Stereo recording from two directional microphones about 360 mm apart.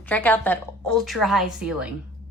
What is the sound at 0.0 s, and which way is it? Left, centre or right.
A woman's voice, centre.